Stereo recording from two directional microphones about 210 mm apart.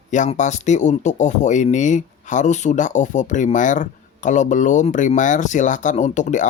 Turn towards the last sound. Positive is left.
turn(degrees=35)  # may be behind; listen again after turning